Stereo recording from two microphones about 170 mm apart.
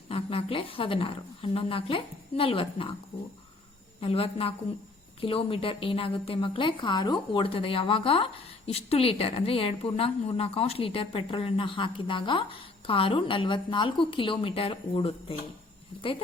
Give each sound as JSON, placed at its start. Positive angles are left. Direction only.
{"t": 0.1, "sound": "a woman's voice", "side_deg": 35}
{"t": 4.0, "sound": "a woman's voice", "side_deg": 35}